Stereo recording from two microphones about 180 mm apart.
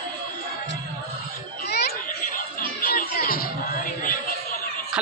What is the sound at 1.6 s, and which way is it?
Children playing, 65° left (ahead or behind).